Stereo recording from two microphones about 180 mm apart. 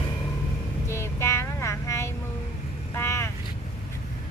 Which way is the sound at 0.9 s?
15° left (ahead or behind).